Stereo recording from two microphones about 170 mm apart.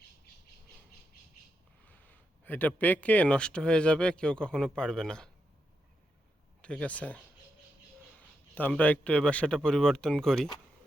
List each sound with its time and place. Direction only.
1.8 s speech: 10° left (ahead or behind)
6.6 s speech: 5° left (ahead or behind)
8.5 s a man's voice: 10° left (ahead or behind)